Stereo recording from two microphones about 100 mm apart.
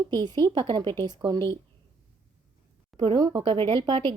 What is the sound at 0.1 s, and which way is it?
Speech, 50° right (ahead or behind).